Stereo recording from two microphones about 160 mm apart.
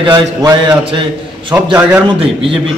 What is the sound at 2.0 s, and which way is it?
Speech, 35° right (ahead or behind).